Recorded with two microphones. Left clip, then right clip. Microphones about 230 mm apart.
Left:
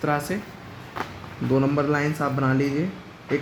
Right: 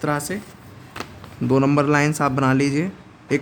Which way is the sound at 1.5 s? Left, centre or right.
Right.